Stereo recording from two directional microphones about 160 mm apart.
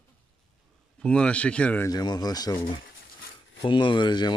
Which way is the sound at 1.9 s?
25° left (ahead or behind).